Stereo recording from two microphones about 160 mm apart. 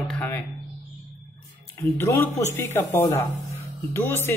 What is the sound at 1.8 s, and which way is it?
A man's voice, 15° left (ahead or behind).